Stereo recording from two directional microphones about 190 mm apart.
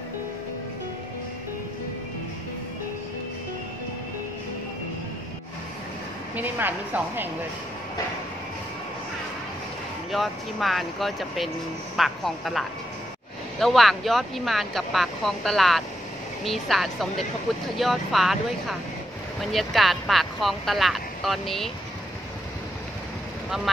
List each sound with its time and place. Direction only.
6.3 s speech: 10° right (ahead or behind)
10.1 s speech: centre (ahead or behind)